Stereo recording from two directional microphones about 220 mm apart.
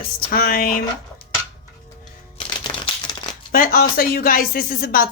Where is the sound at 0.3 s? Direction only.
40° left (ahead or behind).